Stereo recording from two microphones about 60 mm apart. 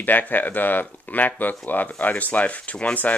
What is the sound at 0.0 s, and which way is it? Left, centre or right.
Speech, left.